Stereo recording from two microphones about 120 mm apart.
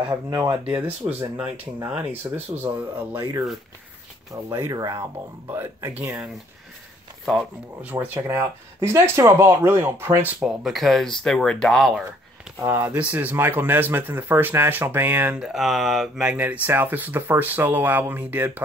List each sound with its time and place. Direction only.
0.7 s speech: 15° right (ahead or behind)
4.3 s speech: 30° right (ahead or behind)
7.8 s speech: 15° right (ahead or behind)
10.4 s speech: 5° right (ahead or behind)
12.6 s speech: 25° right (ahead or behind)
12.9 s speech: 10° right (ahead or behind)